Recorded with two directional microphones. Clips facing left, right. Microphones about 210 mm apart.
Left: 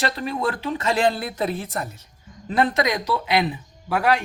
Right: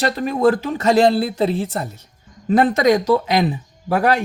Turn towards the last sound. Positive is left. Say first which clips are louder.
# right 4 dB
turn(degrees=-40)  # may be behind; listen again after turning